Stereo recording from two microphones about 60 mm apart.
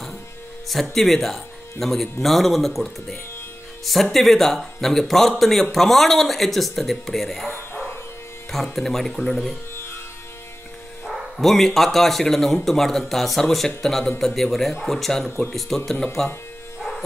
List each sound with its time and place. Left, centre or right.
0.7 s speech: centre
7.4 s bow-wow: left
8.7 s speech: centre
11.1 s speech: centre